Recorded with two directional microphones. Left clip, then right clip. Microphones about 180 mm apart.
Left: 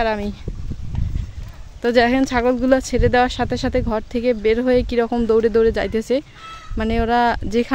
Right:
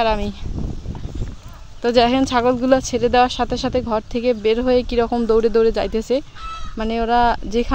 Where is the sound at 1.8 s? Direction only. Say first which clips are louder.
Even; 10° left (ahead or behind).